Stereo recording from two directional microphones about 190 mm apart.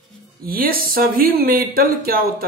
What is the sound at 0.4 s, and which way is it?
Speech, 50° right (ahead or behind).